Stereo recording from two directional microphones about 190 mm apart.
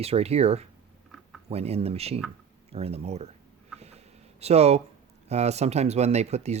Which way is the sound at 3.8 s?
35° right (ahead or behind).